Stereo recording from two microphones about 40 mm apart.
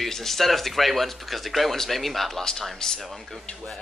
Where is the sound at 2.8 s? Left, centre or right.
Centre.